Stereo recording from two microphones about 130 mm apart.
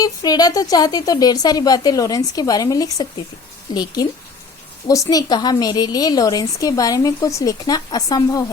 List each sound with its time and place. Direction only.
0.0 s a woman's voice: 30° left (ahead or behind)
7.6 s a woman's voice: 35° left (ahead or behind)